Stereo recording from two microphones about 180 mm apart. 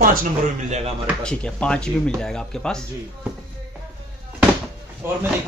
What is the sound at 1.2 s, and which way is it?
Speech, 5° left (ahead or behind).